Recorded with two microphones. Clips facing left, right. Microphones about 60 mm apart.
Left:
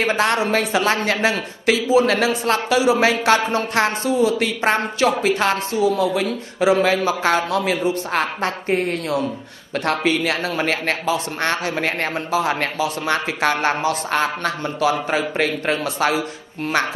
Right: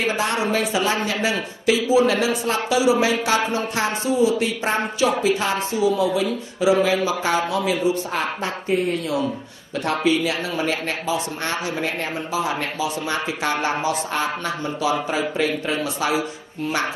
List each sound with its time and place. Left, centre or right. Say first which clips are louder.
0.0 s a woman's voice: left 3 dB; left